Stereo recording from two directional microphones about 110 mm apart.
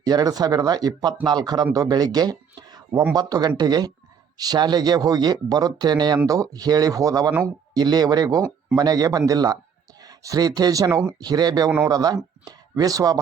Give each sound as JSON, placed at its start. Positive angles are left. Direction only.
{"t": 0.0, "sound": "speech", "side_deg": -35}